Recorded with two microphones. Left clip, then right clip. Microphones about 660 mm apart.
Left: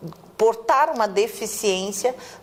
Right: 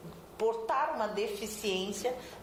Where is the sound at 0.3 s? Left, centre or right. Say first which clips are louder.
Left 13 dB; left.